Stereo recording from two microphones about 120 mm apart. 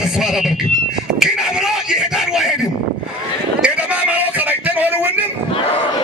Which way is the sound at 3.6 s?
10° right (ahead or behind).